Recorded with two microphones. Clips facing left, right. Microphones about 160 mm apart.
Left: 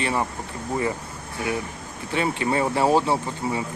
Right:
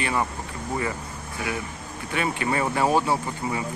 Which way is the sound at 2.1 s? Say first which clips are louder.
Left 2 dB; 25° left (ahead or behind).